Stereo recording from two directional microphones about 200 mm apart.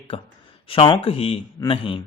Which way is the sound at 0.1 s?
30° left (ahead or behind).